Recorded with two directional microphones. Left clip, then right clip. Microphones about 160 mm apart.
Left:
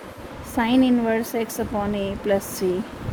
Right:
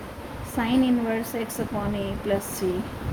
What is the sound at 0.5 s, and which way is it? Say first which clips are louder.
Speech: left 4 dB; 50° left (ahead or behind).